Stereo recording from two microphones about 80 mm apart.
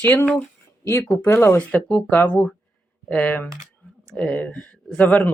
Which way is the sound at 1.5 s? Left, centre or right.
Centre.